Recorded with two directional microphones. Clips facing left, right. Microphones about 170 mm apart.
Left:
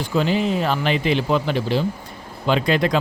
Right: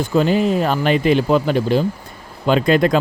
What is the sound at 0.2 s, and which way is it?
Speech, 45° right (ahead or behind).